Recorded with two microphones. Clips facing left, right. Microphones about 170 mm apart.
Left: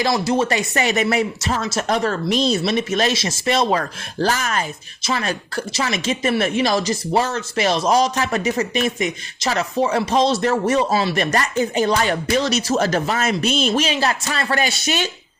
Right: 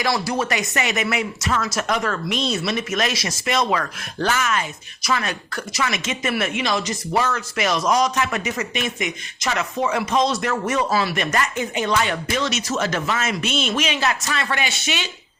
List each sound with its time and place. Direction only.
0.0 s speech: 25° left (ahead or behind); by 15.1 s 40° left (ahead or behind)